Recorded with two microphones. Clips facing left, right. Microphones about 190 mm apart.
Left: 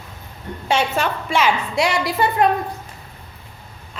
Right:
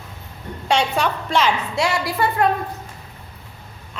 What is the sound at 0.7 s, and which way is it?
A woman's voice, 5° left (ahead or behind).